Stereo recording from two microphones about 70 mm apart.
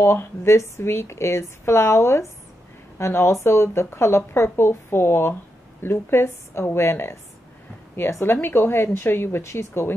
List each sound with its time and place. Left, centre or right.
0.0 s speech: left